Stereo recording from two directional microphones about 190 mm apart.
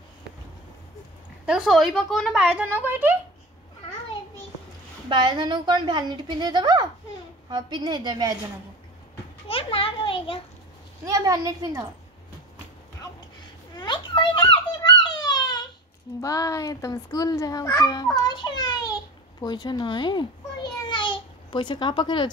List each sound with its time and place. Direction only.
1.4 s a woman's voice: 5° right (ahead or behind)
5.1 s a woman's voice: 25° right (ahead or behind)
9.5 s children playing: 30° left (ahead or behind)
11.1 s a woman's voice: 20° right (ahead or behind)
13.7 s a sound: 25° left (ahead or behind)
16.2 s a child's voice: 20° left (ahead or behind)
19.4 s babbling: 20° left (ahead or behind)